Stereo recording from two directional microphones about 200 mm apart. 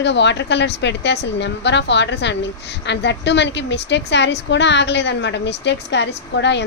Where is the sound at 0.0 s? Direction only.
60° left (ahead or behind).